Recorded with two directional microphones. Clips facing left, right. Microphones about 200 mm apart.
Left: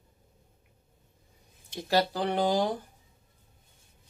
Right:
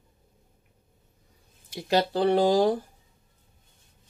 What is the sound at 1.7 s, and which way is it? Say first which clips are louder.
Speech: right 3 dB; 10° right (ahead or behind).